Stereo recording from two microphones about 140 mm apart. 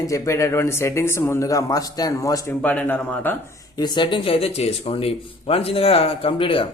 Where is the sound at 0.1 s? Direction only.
20° left (ahead or behind).